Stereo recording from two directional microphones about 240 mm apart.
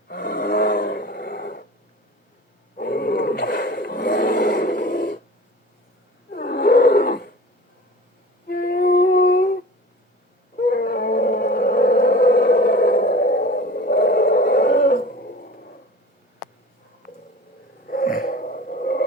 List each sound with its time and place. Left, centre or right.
0.1 s roar: left
2.7 s a sound: left
6.3 s roar: left
8.4 s music: left
10.6 s dog: left
17.8 s a sound: left